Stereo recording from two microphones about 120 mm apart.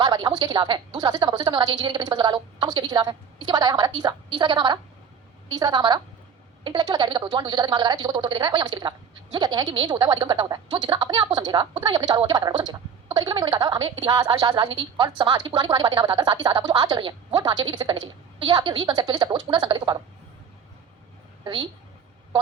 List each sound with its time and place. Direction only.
0.0 s a woman's voice: 35° right (ahead or behind)
21.4 s a woman's voice: 40° right (ahead or behind)